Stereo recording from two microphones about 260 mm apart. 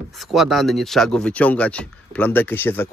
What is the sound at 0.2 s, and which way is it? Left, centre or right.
Speech, centre.